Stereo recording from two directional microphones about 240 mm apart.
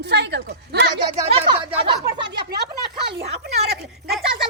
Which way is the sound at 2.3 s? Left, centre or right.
Right.